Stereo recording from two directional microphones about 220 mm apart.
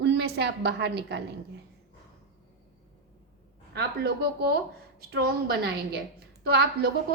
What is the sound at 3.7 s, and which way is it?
A woman's voice, 45° right (ahead or behind).